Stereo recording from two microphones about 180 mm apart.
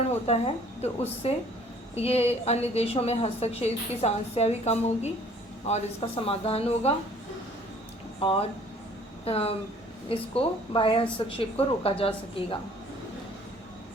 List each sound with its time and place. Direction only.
0.3 s a woman's voice: 35° left (ahead or behind)
8.2 s a woman's voice: 30° left (ahead or behind)